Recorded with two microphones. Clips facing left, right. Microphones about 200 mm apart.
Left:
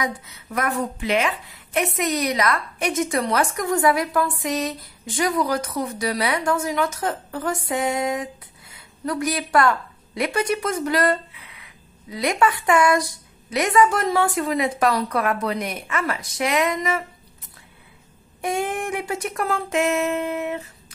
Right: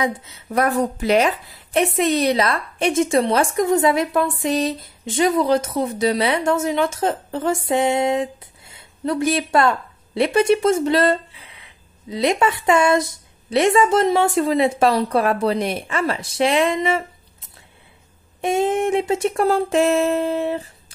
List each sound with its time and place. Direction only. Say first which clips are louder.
0.0 s a woman's voice: right 5 dB; 25° right (ahead or behind)